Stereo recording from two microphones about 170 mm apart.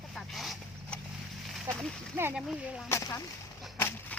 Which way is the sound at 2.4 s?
Centre (ahead or behind).